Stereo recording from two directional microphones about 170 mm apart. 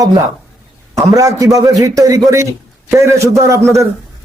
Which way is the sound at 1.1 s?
20° right (ahead or behind).